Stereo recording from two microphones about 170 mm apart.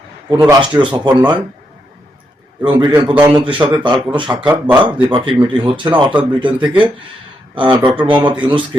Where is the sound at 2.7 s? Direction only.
25° right (ahead or behind).